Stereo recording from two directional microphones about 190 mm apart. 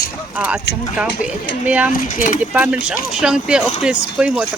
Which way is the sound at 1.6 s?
5° right (ahead or behind).